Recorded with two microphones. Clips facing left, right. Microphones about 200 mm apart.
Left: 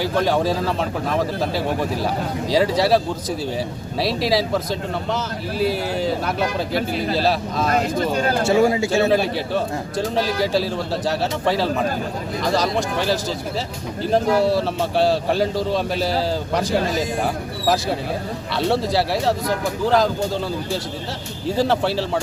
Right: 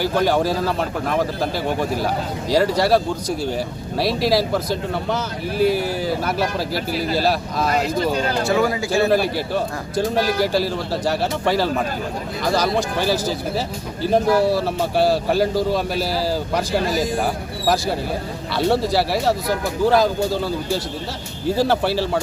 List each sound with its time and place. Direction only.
0.0 s a man's voice: centre (ahead or behind)
8.4 s a man's voice: 25° left (ahead or behind)
10.2 s a man's voice: centre (ahead or behind)
18.7 s a man's voice: centre (ahead or behind)
21.4 s a man's voice: centre (ahead or behind)